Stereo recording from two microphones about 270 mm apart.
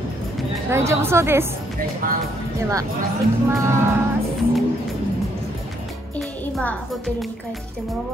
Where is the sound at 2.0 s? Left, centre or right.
Right.